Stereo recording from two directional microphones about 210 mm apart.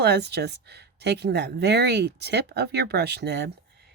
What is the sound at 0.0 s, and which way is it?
Speech, 50° right (ahead or behind).